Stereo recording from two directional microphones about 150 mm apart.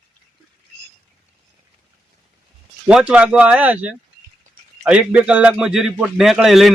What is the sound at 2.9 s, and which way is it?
Speech, 5° right (ahead or behind).